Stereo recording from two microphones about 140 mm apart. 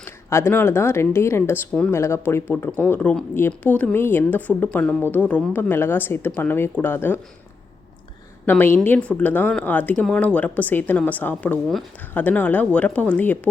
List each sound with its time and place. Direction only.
0.0 s a woman's voice: 20° left (ahead or behind)
8.4 s a woman's voice: 15° left (ahead or behind)